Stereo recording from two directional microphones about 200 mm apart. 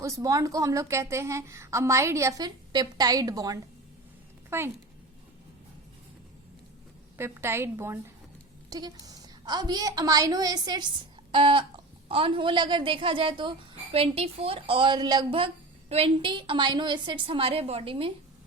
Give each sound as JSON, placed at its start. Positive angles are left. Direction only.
{"t": 0.0, "sound": "a woman's voice", "side_deg": -15}
{"t": 7.2, "sound": "a woman's voice", "side_deg": -10}